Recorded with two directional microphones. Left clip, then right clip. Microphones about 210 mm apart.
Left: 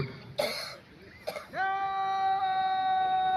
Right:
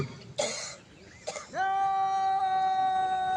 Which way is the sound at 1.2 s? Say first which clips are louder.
Even; 5° right (ahead or behind).